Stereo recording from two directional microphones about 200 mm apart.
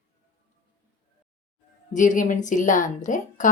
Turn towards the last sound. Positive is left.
turn(degrees=40)  # may be behind; listen again after turning